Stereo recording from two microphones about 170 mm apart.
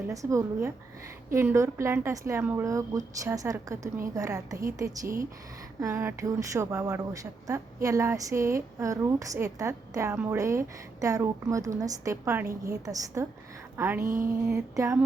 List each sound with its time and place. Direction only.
0.1 s a woman's voice: 20° right (ahead or behind)